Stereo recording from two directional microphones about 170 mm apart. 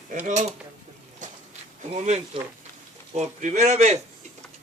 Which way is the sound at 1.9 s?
40° right (ahead or behind).